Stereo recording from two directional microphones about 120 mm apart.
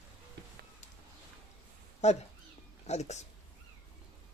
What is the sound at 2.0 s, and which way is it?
Speech, 75° left (ahead or behind).